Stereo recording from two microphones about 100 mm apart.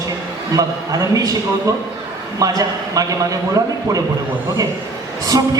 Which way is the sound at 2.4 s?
35° right (ahead or behind).